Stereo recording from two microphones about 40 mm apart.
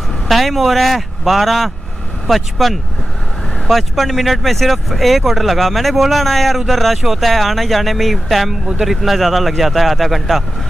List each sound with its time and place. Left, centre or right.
0.3 s speech: centre